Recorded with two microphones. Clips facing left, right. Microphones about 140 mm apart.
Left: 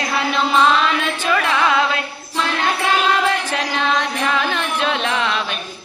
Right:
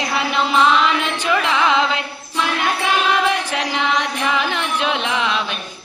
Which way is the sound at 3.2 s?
15° right (ahead or behind).